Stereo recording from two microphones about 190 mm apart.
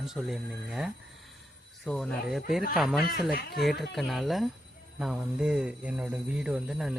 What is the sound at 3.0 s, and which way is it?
Speech, 50° left (ahead or behind).